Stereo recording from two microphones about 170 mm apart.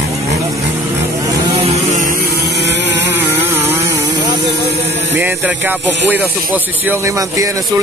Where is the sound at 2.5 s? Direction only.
90° right.